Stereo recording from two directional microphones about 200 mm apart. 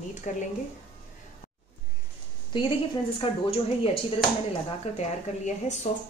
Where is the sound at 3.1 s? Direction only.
25° left (ahead or behind).